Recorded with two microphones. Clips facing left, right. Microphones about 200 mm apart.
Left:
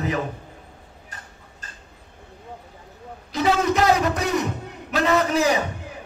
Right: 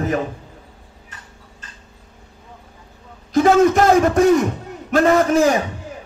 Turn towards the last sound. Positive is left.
turn(degrees=-45)  # may be behind; listen again after turning